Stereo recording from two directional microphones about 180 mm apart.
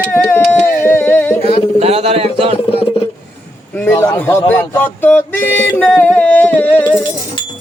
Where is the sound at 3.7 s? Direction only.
15° left (ahead or behind).